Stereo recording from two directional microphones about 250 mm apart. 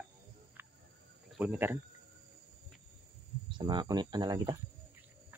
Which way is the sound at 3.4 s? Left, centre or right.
Centre.